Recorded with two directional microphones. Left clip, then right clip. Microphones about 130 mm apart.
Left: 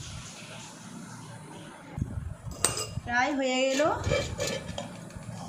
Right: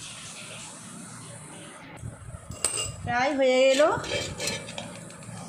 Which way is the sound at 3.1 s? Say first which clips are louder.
Right 4 dB; 45° right (ahead or behind).